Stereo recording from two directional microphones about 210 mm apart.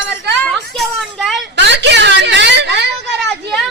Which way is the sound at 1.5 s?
55° right (ahead or behind).